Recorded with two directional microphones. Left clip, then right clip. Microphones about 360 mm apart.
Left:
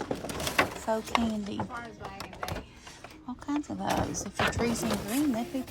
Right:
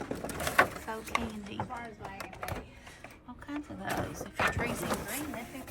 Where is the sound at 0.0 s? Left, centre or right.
Centre.